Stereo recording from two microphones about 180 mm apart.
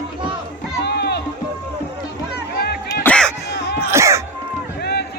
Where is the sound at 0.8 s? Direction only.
65° left (ahead or behind).